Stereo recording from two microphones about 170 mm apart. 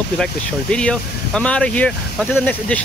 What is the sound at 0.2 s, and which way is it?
Speech, 5° left (ahead or behind).